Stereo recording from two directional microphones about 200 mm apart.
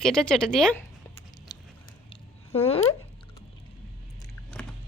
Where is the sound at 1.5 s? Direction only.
20° left (ahead or behind).